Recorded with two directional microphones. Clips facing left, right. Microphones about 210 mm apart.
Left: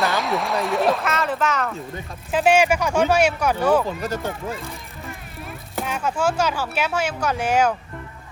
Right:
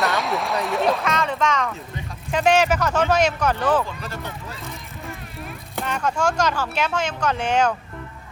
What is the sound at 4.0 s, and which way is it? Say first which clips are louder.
Speech: left 7 dB; 45° left (ahead or behind).